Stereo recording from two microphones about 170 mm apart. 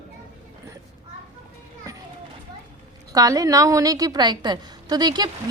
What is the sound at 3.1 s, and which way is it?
A woman's voice, 20° right (ahead or behind).